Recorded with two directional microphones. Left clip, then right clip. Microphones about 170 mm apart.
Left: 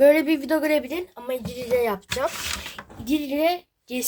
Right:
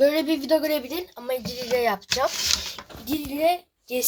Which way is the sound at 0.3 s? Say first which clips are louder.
Even; 10° left (ahead or behind).